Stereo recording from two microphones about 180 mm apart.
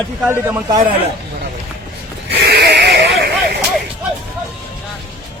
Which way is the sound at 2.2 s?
65° right (ahead or behind).